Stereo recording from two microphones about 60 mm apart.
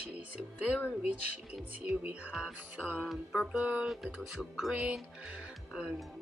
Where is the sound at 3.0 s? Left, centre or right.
Centre.